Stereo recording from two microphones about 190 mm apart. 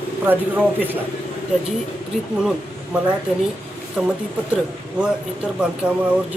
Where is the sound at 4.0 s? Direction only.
5° right (ahead or behind).